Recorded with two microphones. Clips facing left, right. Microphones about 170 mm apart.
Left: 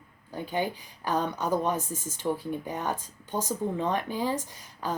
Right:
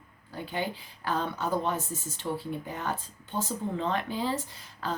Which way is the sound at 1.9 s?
45° left (ahead or behind).